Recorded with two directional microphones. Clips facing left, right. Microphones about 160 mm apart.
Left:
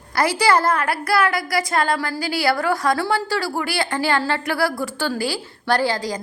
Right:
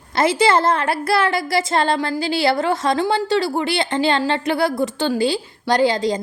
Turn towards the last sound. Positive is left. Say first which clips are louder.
# right 4 dB
turn(degrees=-20)  # may be behind; listen again after turning